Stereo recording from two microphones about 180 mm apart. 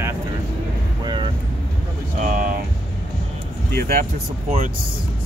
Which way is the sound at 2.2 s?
45° right (ahead or behind).